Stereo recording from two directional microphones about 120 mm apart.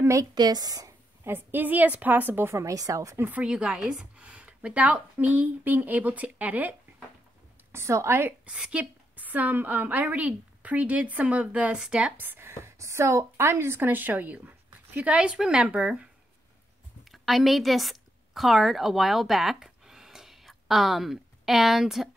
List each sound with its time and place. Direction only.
0.0 s a woman's voice: 25° right (ahead or behind)
3.2 s a woman's voice: 15° right (ahead or behind)
7.7 s a woman's voice: 20° right (ahead or behind)
17.1 s a woman's voice: centre (ahead or behind)